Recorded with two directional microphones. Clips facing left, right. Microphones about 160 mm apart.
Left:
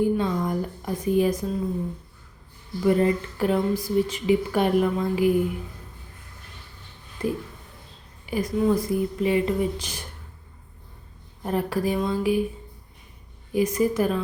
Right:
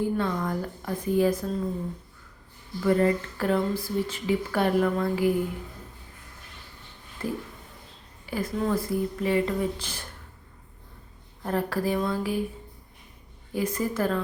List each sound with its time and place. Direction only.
0.0 s speech: 15° left (ahead or behind)
2.8 s speech: 20° left (ahead or behind)
7.2 s a sound: 15° left (ahead or behind)
8.3 s speech: 15° left (ahead or behind)
11.4 s speech: 15° left (ahead or behind)
13.5 s speech: 15° left (ahead or behind)